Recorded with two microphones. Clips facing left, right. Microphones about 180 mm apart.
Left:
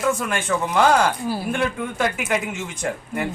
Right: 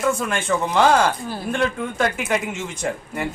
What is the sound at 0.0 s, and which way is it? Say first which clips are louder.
A woman's voice: right 1 dB; centre (ahead or behind).